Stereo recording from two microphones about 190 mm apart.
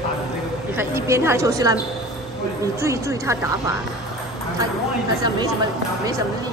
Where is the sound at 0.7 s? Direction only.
15° right (ahead or behind).